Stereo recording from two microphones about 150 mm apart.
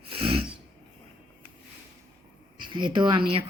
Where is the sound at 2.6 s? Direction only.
30° right (ahead or behind).